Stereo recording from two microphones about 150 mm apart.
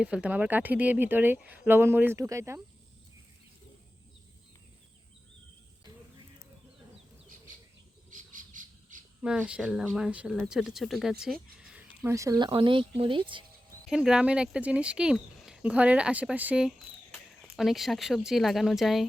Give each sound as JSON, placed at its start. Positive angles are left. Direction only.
{"t": 0.0, "sound": "speech", "side_deg": -10}
{"t": 8.1, "sound": "cricket", "side_deg": -60}
{"t": 9.2, "sound": "speech", "side_deg": -5}
{"t": 11.6, "sound": "a sound", "side_deg": -10}
{"t": 12.5, "sound": "speech", "side_deg": -35}
{"t": 13.9, "sound": "speech", "side_deg": -5}